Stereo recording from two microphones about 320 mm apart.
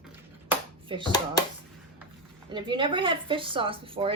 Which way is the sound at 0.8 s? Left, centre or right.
Centre.